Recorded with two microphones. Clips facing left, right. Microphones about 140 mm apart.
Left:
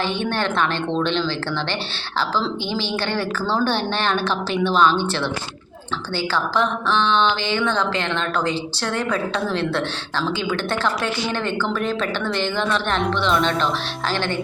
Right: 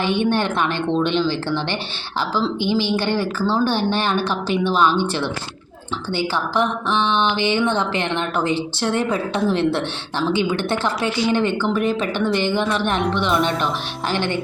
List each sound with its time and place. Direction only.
0.2 s speech: 15° right (ahead or behind)
14.1 s speech: 15° right (ahead or behind)